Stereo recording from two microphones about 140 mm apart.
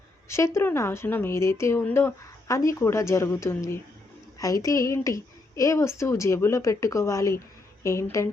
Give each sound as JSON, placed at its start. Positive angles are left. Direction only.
{"t": 0.3, "sound": "a woman's voice", "side_deg": 20}